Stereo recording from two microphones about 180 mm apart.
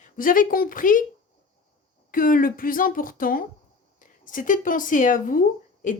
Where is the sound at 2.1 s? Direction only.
50° left (ahead or behind).